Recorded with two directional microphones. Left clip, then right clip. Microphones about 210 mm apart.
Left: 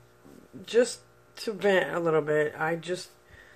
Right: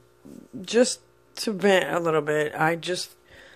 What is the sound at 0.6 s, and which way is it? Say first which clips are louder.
Speech: right 3 dB; 45° right (ahead or behind).